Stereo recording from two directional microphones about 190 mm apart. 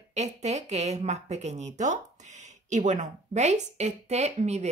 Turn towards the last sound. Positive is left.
turn(degrees=-35)  # may be behind; listen again after turning